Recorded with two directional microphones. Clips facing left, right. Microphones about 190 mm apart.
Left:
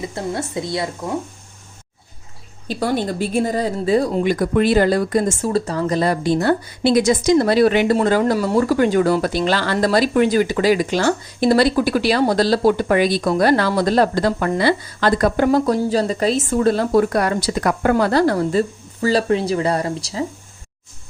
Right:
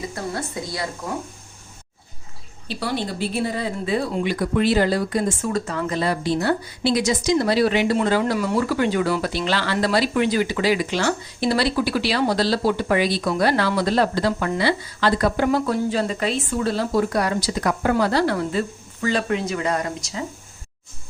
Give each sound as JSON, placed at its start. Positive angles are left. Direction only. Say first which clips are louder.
{"t": 0.1, "sound": "speech", "louder": "left 4 dB", "side_deg": 25}
{"t": 2.6, "sound": "speech", "louder": "left 5 dB", "side_deg": 45}